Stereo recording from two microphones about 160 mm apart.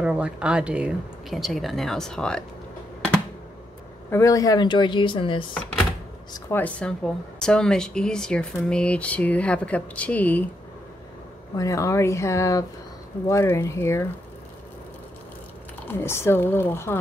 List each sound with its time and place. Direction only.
0.0 s speech: 5° right (ahead or behind)
4.1 s speech: 20° left (ahead or behind)
6.5 s speech: 10° left (ahead or behind)
11.5 s speech: 20° left (ahead or behind)
15.9 s speech: 15° left (ahead or behind)